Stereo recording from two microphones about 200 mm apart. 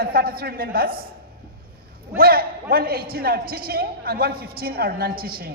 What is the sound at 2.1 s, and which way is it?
A man's voice, 50° right (ahead or behind).